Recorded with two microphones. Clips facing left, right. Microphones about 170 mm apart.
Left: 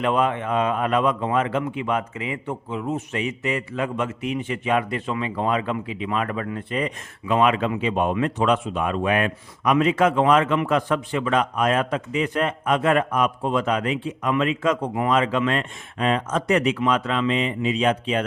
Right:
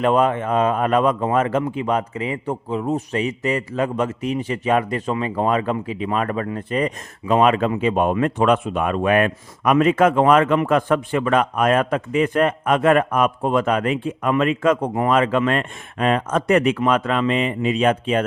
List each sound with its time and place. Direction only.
0.0 s a man's voice: 40° right (ahead or behind)